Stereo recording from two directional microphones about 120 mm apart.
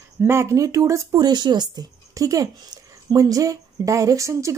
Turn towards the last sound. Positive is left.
turn(degrees=-25)  # may be behind; listen again after turning